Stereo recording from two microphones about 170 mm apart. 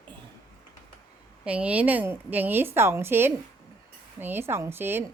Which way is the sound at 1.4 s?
10° right (ahead or behind).